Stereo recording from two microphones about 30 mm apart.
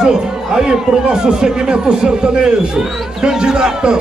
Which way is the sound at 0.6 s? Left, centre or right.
Right.